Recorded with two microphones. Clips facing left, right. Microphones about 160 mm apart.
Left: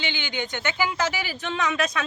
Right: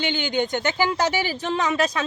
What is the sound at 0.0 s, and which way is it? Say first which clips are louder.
A woman's voice: right 7 dB; 45° right (ahead or behind).